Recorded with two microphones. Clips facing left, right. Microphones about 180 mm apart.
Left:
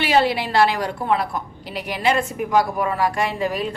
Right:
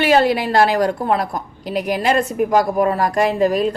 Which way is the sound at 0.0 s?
45° right (ahead or behind).